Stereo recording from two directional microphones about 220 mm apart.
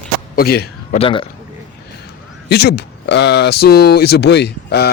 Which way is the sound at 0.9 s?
25° left (ahead or behind).